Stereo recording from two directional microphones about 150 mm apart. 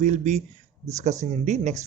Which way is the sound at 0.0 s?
50° right (ahead or behind).